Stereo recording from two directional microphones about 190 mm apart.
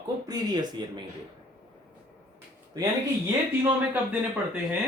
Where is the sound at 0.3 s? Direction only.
20° right (ahead or behind).